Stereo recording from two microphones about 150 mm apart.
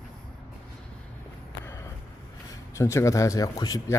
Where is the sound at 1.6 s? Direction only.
20° left (ahead or behind).